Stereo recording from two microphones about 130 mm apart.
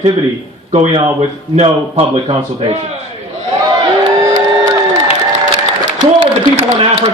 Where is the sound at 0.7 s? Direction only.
60° right (ahead or behind).